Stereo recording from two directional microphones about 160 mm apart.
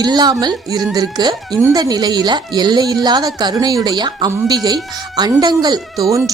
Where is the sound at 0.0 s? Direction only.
25° right (ahead or behind).